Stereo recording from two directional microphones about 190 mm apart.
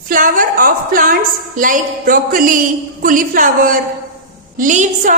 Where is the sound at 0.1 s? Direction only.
45° right (ahead or behind).